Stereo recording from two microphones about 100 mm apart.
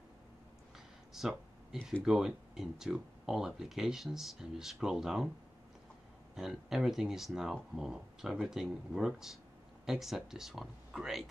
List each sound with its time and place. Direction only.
0.7 s a sound: 5° right (ahead or behind)
2.0 s speech: 5° right (ahead or behind)
6.3 s speech: 5° right (ahead or behind)